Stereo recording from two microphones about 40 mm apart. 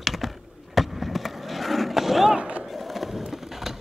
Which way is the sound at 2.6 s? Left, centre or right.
Centre.